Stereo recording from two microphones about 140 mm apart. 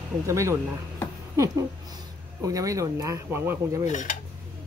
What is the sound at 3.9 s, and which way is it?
Speech, 60° left (ahead or behind).